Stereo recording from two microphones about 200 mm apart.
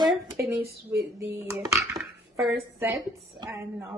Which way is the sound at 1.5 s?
15° right (ahead or behind).